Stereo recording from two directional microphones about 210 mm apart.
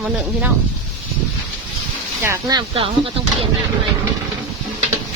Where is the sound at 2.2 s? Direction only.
15° right (ahead or behind).